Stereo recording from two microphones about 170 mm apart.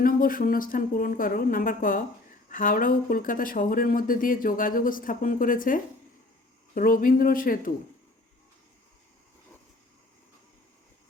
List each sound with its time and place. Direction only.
0.0 s speech: 55° left (ahead or behind)